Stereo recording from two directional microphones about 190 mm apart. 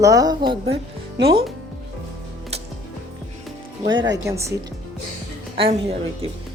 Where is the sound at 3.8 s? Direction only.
20° right (ahead or behind).